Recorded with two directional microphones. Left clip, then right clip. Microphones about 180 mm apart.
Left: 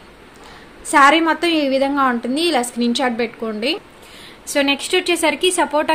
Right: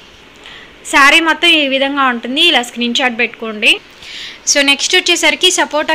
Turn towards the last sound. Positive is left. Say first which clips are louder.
# right 5 dB
turn(degrees=5)  # may be behind; listen again after turning